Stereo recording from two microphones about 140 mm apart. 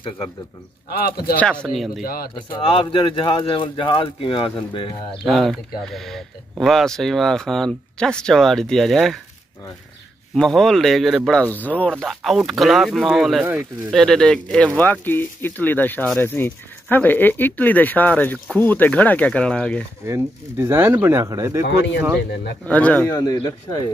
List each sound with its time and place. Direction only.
0.8 s speech: 90° left
1.3 s speech: 10° left (ahead or behind)
2.0 s speech: 90° left
2.3 s speech: 40° left (ahead or behind)
5.2 s speech: centre (ahead or behind)
10.3 s speech: centre (ahead or behind)
12.0 s speech: centre (ahead or behind)
20.1 s speech: 15° right (ahead or behind)
22.7 s speech: 10° left (ahead or behind)
23.0 s speech: 25° left (ahead or behind)